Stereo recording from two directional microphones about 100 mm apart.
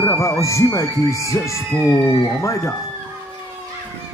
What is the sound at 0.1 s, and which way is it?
Speech, 30° left (ahead or behind).